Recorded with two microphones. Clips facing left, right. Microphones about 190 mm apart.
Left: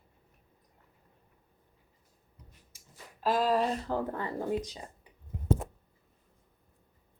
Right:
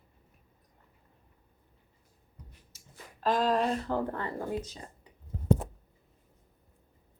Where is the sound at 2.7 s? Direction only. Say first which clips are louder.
Right 2 dB; 10° left (ahead or behind).